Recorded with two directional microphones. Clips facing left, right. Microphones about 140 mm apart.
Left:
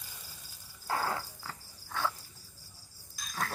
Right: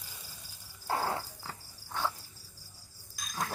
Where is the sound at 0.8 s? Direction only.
25° right (ahead or behind).